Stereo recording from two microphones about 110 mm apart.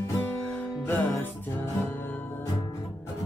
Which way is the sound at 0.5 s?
15° left (ahead or behind).